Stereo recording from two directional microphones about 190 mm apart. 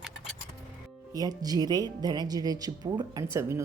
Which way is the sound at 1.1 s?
20° right (ahead or behind).